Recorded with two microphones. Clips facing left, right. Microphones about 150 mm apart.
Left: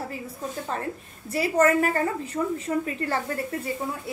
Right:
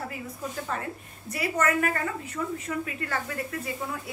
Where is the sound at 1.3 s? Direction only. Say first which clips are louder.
Left 6 dB; 30° left (ahead or behind).